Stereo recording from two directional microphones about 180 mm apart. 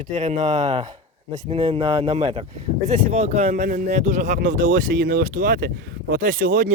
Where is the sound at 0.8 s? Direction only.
25° right (ahead or behind).